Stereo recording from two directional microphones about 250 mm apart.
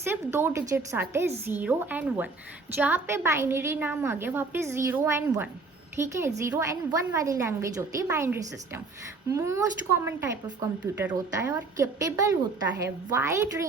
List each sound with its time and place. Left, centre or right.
0.0 s speech: centre